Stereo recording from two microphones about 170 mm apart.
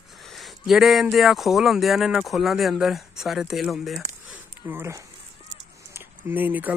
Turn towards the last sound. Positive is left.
turn(degrees=-10)  # may be behind; listen again after turning